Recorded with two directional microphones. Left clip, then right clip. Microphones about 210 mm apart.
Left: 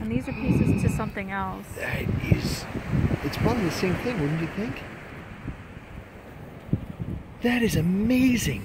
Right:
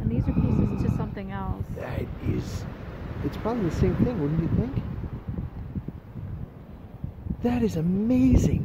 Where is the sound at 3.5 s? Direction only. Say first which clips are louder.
Even; 45° right (ahead or behind).